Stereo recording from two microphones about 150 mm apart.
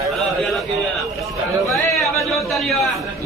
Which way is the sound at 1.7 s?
Centre (ahead or behind).